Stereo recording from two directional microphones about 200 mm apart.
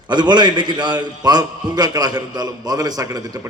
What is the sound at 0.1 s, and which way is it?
A man's voice, 20° right (ahead or behind).